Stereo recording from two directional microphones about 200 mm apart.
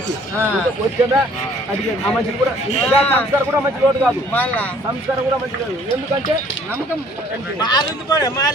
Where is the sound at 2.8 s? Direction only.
10° left (ahead or behind).